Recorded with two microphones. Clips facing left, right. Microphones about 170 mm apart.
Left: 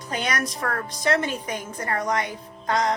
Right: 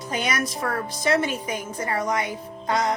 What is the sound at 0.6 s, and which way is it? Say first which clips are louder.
Speech: right 1 dB; 25° right (ahead or behind).